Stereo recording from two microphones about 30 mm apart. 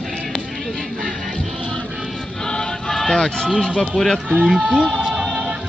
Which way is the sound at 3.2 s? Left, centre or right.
Left.